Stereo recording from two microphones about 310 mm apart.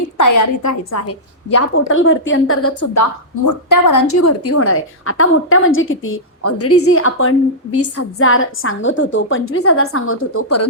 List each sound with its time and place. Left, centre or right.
0.2 s a woman's voice: left
1.9 s a woman's voice: left